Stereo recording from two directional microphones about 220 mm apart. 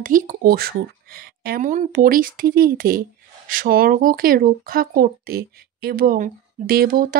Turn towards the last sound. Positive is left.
turn(degrees=-40)  # may be behind; listen again after turning